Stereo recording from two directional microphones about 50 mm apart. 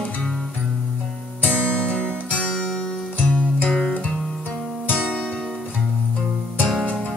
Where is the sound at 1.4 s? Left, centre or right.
Left.